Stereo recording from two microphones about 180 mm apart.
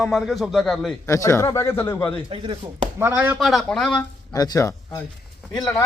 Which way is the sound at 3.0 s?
10° right (ahead or behind).